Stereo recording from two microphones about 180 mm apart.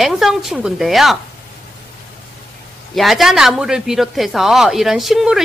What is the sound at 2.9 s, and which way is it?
Speech, centre (ahead or behind).